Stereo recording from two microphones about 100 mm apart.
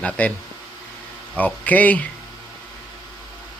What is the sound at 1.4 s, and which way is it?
Speech, 15° left (ahead or behind).